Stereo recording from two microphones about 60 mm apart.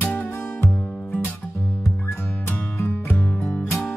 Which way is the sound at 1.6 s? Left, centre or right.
Left.